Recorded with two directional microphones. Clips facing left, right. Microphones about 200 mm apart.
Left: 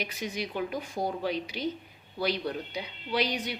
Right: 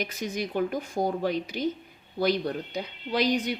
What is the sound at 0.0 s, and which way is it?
A woman's voice, 45° right (ahead or behind).